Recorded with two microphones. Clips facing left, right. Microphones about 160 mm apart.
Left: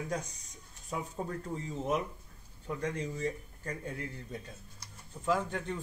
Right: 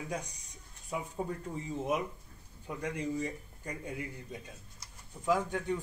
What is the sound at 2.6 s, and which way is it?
Speech, 10° right (ahead or behind).